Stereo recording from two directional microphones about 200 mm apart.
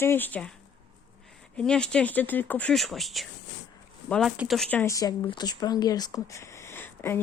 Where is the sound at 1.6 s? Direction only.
5° left (ahead or behind).